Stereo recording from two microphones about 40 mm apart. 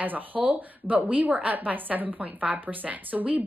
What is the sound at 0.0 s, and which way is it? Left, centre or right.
A woman's voice, right.